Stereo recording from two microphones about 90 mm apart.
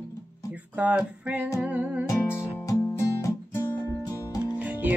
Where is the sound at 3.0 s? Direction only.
35° left (ahead or behind).